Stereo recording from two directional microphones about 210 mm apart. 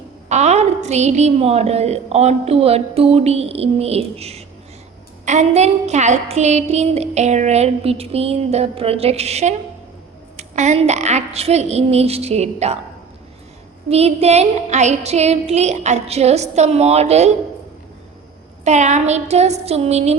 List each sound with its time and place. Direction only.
0.3 s a woman's voice: 30° right (ahead or behind)
13.9 s a woman's voice: 30° right (ahead or behind)
18.6 s a woman's voice: 35° right (ahead or behind)